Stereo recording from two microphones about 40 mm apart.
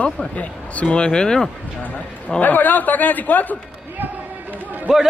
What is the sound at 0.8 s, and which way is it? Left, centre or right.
Speech, left.